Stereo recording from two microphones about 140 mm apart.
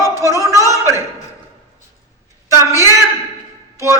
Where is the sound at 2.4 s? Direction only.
20° right (ahead or behind).